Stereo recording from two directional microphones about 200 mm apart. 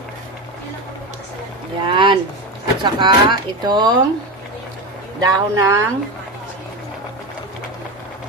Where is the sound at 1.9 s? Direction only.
25° right (ahead or behind).